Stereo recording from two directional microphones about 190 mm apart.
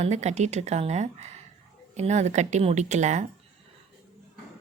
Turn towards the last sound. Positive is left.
turn(degrees=-40)  # may be behind; listen again after turning